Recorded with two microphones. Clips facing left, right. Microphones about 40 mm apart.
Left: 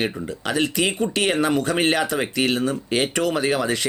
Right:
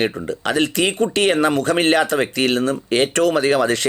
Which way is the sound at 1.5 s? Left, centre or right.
Centre.